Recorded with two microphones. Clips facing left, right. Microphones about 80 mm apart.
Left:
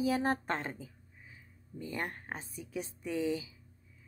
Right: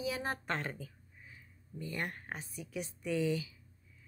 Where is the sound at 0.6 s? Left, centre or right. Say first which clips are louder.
Even; left.